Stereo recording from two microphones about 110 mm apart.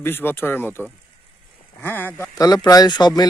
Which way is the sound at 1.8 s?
15° left (ahead or behind).